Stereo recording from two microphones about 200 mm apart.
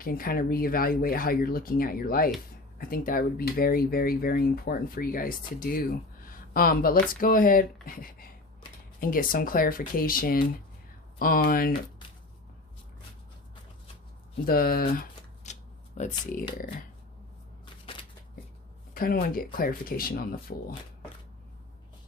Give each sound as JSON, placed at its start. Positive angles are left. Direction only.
{"t": 0.0, "sound": "speech", "side_deg": 45}
{"t": 6.2, "sound": "a sound", "side_deg": 45}
{"t": 7.1, "sound": "speech", "side_deg": 45}
{"t": 14.4, "sound": "speech", "side_deg": 45}
{"t": 15.4, "sound": "shuffling cards", "side_deg": 35}
{"t": 16.0, "sound": "speech", "side_deg": 40}
{"t": 18.9, "sound": "speech", "side_deg": 45}